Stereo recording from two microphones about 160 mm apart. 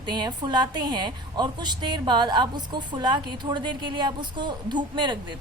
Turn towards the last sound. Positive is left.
turn(degrees=-30)  # may be behind; listen again after turning